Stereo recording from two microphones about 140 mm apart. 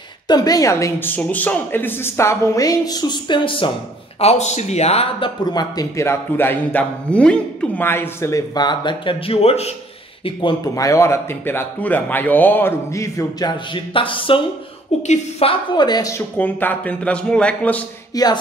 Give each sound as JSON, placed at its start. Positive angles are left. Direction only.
{"t": 0.3, "sound": "a man's voice", "side_deg": 25}
{"t": 4.2, "sound": "speech", "side_deg": 50}
{"t": 10.7, "sound": "a man's voice", "side_deg": 25}
{"t": 18.1, "sound": "speech", "side_deg": 30}